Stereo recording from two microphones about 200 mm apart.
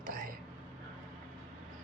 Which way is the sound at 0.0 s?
45° right (ahead or behind).